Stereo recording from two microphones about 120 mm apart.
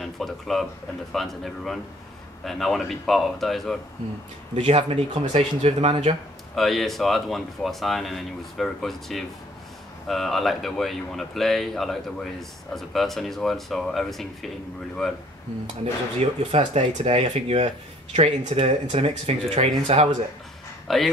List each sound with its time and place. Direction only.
0.0 s speech: centre (ahead or behind)
4.6 s speech: 60° right (ahead or behind)
6.5 s speech: centre (ahead or behind)
16.2 s speech: 60° right (ahead or behind)
20.9 s speech: centre (ahead or behind)